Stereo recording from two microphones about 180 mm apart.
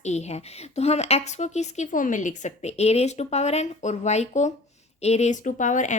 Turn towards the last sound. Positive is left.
turn(degrees=45)  # may be behind; listen again after turning